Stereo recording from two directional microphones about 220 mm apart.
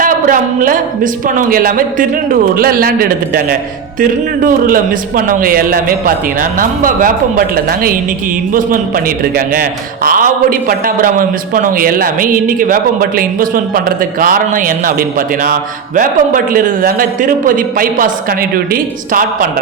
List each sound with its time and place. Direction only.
0.0 s a man's voice: 40° right (ahead or behind)